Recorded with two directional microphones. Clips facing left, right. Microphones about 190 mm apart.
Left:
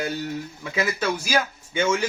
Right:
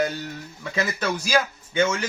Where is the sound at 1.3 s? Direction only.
10° left (ahead or behind).